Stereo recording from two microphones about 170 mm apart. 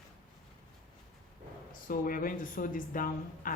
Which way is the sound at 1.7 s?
55° left (ahead or behind).